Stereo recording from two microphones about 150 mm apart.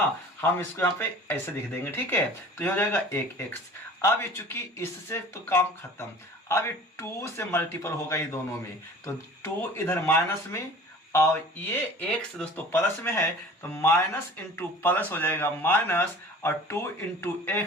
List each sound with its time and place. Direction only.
0.4 s speech: 15° left (ahead or behind)